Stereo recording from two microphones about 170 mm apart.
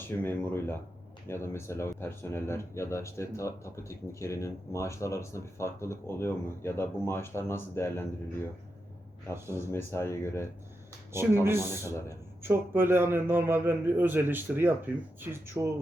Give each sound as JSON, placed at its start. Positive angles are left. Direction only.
{"t": 0.0, "sound": "speech", "side_deg": 15}
{"t": 9.3, "sound": "a man's voice", "side_deg": -15}
{"t": 9.7, "sound": "speech", "side_deg": 15}
{"t": 11.4, "sound": "a man's voice", "side_deg": -15}